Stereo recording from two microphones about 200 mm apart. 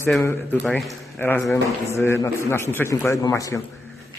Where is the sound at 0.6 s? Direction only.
Centre (ahead or behind).